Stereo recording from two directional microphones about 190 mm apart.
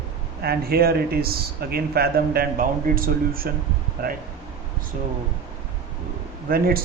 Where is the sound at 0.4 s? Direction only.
55° right (ahead or behind).